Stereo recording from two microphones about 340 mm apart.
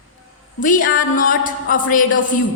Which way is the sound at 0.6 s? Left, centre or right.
Left.